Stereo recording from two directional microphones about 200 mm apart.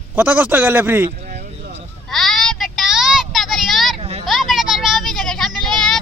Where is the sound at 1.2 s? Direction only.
50° right (ahead or behind).